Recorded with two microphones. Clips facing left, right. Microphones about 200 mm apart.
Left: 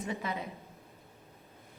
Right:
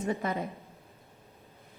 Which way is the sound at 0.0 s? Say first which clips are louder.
Right 5 dB; 50° right (ahead or behind).